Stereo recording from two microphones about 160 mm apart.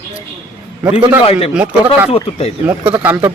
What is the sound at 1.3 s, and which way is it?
Speech, 40° left (ahead or behind).